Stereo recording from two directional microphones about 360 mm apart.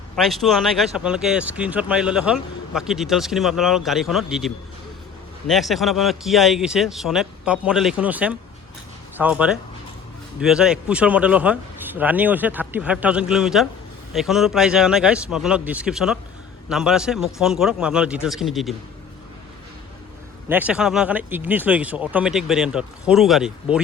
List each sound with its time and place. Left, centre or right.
0.2 s speech: centre
20.5 s speech: centre